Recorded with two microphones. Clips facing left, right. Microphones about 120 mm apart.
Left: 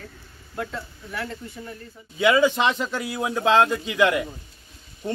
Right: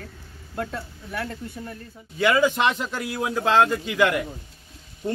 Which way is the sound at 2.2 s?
Centre (ahead or behind).